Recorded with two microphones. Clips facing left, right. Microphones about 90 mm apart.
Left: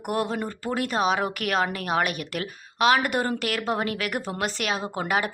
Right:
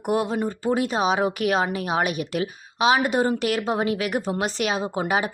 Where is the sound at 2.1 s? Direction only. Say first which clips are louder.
Right 5 dB; 50° left (ahead or behind).